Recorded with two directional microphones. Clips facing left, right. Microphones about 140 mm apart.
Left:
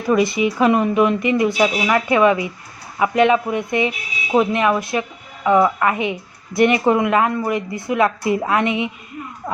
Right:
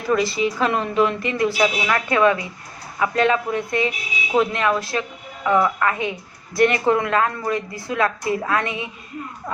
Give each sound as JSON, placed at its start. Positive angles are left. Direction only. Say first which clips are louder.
{"t": 0.1, "sound": "a woman's voice", "louder": "left 3 dB", "side_deg": 15}